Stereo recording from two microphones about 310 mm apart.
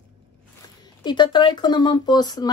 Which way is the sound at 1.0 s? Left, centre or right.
Centre.